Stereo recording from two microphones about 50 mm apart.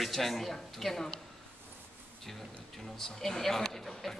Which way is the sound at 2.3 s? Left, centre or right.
Centre.